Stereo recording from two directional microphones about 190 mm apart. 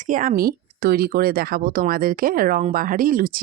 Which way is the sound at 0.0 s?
45° right (ahead or behind).